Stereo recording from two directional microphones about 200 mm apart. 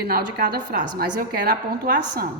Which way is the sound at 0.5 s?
50° right (ahead or behind).